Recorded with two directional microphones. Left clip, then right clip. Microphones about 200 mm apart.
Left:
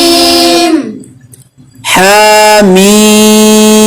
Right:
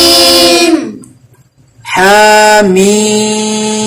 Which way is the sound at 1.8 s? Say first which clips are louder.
Left 1 dB; 50° left (ahead or behind).